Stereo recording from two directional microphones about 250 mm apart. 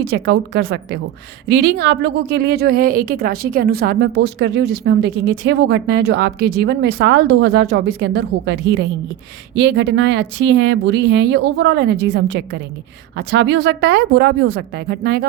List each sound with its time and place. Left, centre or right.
0.0 s a woman's voice: right